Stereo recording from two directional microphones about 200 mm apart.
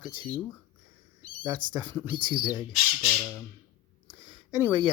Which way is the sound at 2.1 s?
25° right (ahead or behind).